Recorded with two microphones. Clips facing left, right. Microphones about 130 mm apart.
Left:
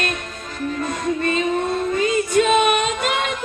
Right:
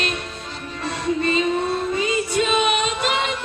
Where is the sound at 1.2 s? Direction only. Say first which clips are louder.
Right 1 dB; 50° left (ahead or behind).